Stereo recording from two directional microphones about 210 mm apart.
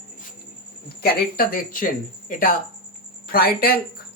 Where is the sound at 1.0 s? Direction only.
40° left (ahead or behind).